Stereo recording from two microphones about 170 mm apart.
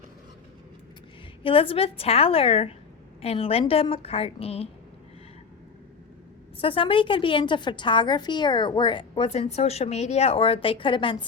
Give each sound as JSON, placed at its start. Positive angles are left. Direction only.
{"t": 1.4, "sound": "a woman's voice", "side_deg": 30}
{"t": 6.6, "sound": "a woman's voice", "side_deg": 30}